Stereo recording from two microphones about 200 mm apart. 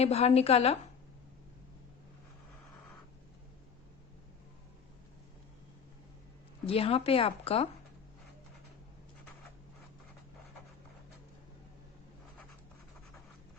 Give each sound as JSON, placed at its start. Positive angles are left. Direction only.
{"t": 0.0, "sound": "a woman's voice", "side_deg": 30}
{"t": 6.7, "sound": "speech", "side_deg": 30}